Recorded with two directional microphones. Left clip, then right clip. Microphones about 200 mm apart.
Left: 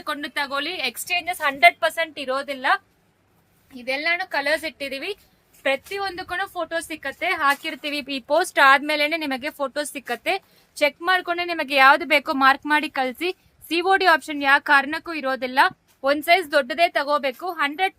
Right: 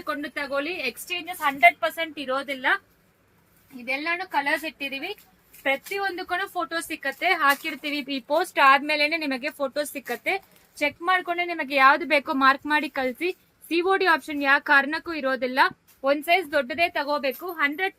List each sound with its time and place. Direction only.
0.0 s a woman's voice: 50° left (ahead or behind)
3.9 s a woman's voice: 40° left (ahead or behind); by 15.7 s 15° left (ahead or behind)
16.0 s speech: 25° left (ahead or behind)